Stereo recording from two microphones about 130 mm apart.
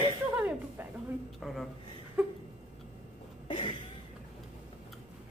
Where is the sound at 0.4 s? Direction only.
10° right (ahead or behind).